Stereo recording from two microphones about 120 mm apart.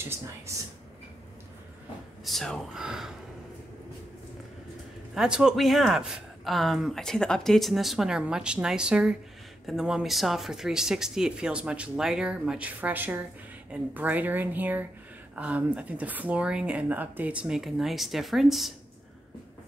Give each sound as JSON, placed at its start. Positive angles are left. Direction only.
{"t": 0.0, "sound": "speech", "side_deg": -20}
{"t": 2.2, "sound": "speech", "side_deg": 5}
{"t": 5.1, "sound": "speech", "side_deg": -5}